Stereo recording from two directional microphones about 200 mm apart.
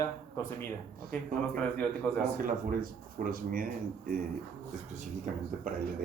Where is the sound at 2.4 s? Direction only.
45° right (ahead or behind).